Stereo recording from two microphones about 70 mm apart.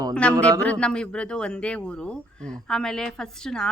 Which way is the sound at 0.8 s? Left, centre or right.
Centre.